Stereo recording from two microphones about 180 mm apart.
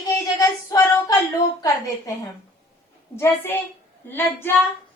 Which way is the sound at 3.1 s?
10° left (ahead or behind).